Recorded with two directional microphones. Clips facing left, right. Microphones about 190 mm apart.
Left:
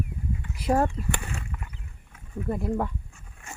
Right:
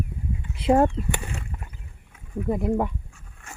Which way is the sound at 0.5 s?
25° right (ahead or behind).